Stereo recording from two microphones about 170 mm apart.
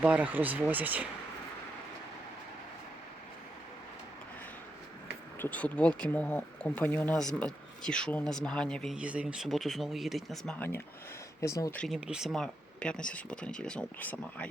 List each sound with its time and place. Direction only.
0.0 s speech: 10° right (ahead or behind)
5.4 s speech: 10° left (ahead or behind)
11.8 s speech: 5° right (ahead or behind)